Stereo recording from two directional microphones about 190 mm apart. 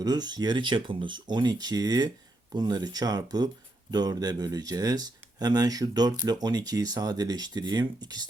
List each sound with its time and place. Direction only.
0.0 s speech: 20° right (ahead or behind)